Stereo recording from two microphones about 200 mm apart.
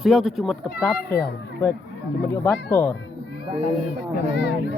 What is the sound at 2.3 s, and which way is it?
Speech, 10° left (ahead or behind).